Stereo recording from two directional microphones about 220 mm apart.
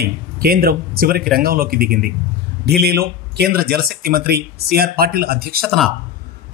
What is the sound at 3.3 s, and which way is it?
A man's voice, 45° right (ahead or behind).